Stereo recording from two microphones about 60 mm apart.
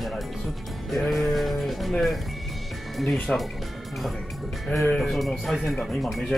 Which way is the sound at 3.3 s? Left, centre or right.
Centre.